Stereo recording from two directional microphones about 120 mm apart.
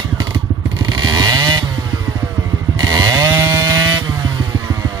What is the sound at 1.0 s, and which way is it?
Motorcycle, 35° right (ahead or behind).